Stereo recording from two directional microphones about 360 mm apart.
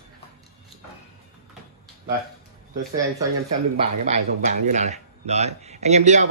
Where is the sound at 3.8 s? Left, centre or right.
Centre.